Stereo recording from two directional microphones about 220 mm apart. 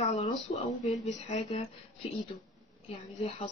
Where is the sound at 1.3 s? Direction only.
20° left (ahead or behind).